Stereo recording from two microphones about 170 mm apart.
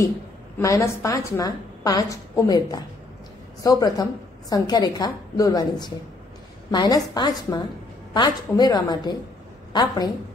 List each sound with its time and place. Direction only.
0.6 s a woman's voice: 20° left (ahead or behind)